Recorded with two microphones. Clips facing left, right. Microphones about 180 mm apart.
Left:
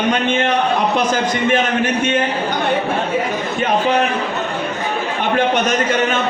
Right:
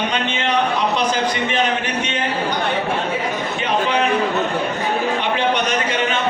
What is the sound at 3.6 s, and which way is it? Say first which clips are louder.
Speech: left 3 dB; 45° left (ahead or behind).